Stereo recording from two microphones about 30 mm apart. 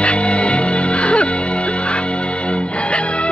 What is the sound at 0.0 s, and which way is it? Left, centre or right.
Music, left.